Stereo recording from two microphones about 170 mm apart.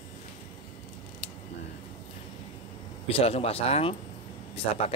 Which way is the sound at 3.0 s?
35° left (ahead or behind).